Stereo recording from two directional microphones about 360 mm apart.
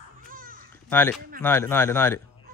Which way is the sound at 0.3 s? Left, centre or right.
Right.